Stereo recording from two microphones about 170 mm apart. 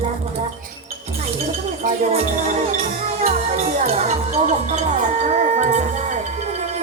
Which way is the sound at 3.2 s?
40° right (ahead or behind).